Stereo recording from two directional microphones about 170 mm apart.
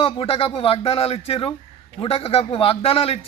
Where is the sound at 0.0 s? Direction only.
35° left (ahead or behind).